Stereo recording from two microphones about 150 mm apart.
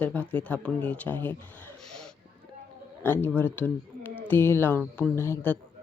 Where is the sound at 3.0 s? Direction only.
15° left (ahead or behind).